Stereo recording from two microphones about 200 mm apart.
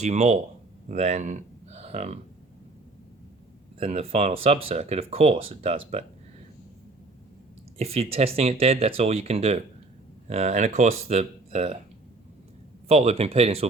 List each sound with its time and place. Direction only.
0.0 s speech: 35° right (ahead or behind)
3.8 s speech: 30° right (ahead or behind)
7.8 s speech: 30° right (ahead or behind)
12.9 s speech: 30° right (ahead or behind)